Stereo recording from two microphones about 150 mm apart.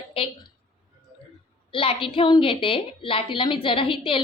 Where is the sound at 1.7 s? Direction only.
35° left (ahead or behind).